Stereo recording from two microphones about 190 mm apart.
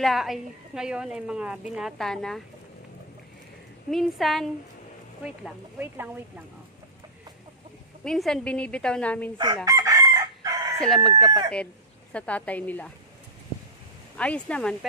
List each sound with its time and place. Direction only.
0.0 s a woman's voice: centre (ahead or behind)
3.9 s a woman's voice: centre (ahead or behind)
8.0 s a woman's voice: centre (ahead or behind)
9.7 s chicken: 15° right (ahead or behind)
10.8 s a woman's voice: centre (ahead or behind)
14.1 s speech: 5° left (ahead or behind)